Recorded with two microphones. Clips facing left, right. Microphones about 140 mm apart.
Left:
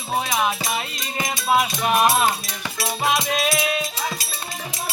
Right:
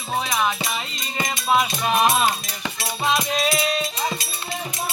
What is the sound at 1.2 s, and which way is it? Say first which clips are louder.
Music: even; 5° left (ahead or behind).